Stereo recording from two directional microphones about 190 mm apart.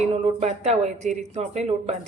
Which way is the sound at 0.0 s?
35° right (ahead or behind).